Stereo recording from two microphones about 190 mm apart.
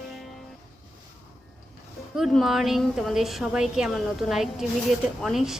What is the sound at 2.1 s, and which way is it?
A woman's voice, centre (ahead or behind).